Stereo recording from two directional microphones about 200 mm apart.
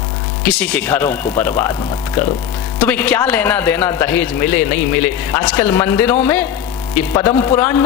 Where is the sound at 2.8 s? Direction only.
10° left (ahead or behind).